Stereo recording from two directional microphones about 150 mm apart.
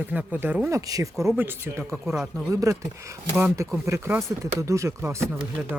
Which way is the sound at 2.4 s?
20° right (ahead or behind).